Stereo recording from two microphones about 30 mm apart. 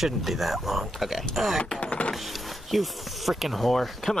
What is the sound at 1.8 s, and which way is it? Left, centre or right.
Vehicle, left.